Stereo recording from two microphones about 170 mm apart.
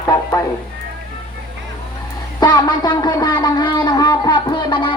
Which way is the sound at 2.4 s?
25° left (ahead or behind).